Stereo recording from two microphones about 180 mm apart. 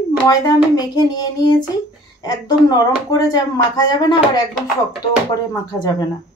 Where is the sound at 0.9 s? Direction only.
20° left (ahead or behind).